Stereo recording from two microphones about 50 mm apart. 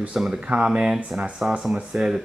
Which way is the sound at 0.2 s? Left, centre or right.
Centre.